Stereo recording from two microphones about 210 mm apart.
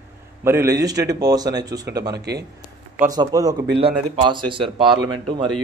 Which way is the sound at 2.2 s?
50° right (ahead or behind).